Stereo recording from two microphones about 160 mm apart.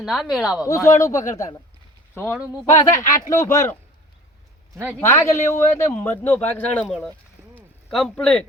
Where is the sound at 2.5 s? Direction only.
20° left (ahead or behind).